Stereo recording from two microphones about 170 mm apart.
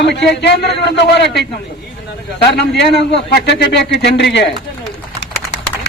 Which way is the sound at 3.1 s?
80° left.